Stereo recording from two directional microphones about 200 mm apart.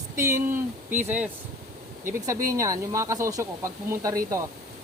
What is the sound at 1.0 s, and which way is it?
Speech, 5° right (ahead or behind).